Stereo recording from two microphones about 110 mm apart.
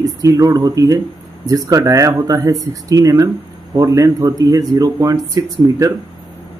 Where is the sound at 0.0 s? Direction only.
30° right (ahead or behind).